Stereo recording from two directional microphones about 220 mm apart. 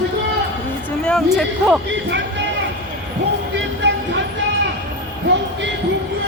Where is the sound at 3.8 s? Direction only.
55° right (ahead or behind).